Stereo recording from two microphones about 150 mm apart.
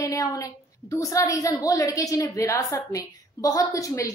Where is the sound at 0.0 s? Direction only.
25° left (ahead or behind).